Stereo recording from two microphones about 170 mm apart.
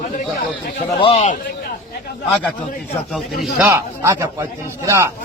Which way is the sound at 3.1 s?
Centre (ahead or behind).